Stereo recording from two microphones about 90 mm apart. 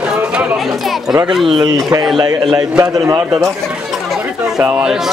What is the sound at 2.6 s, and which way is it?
Speech, 45° right (ahead or behind).